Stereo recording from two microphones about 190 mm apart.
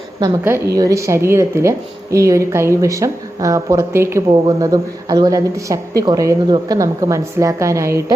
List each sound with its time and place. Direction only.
0.2 s speech: 15° right (ahead or behind)